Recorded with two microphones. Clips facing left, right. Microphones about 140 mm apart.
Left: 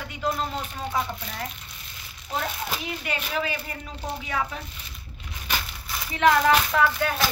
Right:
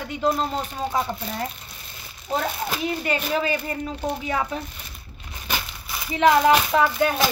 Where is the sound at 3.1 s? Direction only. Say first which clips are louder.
Right 4 dB; 35° right (ahead or behind).